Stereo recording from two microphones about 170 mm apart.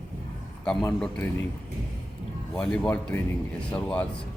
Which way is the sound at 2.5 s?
5° left (ahead or behind).